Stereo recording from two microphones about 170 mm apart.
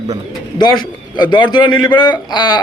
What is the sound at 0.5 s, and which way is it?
A man's voice, 25° left (ahead or behind).